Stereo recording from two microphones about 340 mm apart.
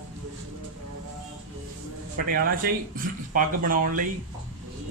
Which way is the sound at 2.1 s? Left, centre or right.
Right.